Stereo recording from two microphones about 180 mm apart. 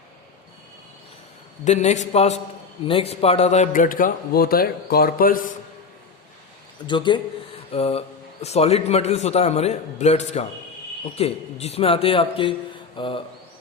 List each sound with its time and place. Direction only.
1.6 s a man's voice: 40° left (ahead or behind)
6.8 s a man's voice: 25° left (ahead or behind)